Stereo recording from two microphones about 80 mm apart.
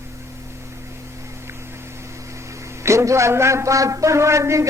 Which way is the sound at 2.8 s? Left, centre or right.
Right.